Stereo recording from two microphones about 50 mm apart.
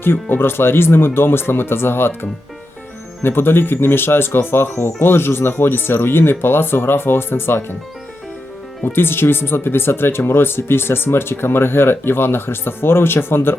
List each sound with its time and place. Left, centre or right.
0.0 s speech: left
3.2 s speech: left
9.0 s speech: left